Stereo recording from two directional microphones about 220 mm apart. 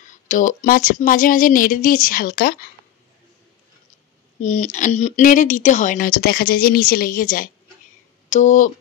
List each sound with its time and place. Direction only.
0.0 s speech: 35° left (ahead or behind)
4.4 s speech: 35° left (ahead or behind)